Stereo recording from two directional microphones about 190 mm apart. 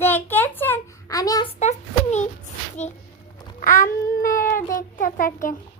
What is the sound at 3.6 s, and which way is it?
A child's voice, 45° left (ahead or behind).